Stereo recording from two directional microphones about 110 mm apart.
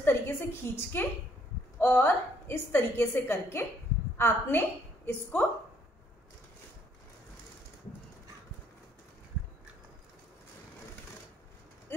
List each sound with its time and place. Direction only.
0.0 s a woman's voice: 20° left (ahead or behind)